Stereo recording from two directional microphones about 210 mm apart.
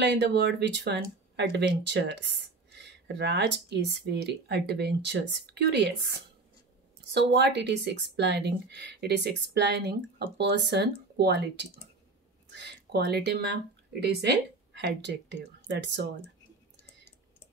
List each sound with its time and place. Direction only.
0.0 s speech: 55° right (ahead or behind)
7.2 s speech: 55° right (ahead or behind)